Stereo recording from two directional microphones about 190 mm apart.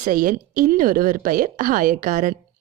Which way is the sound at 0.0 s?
45° right (ahead or behind).